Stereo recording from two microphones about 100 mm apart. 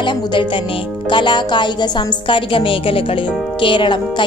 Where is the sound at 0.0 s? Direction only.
50° left (ahead or behind).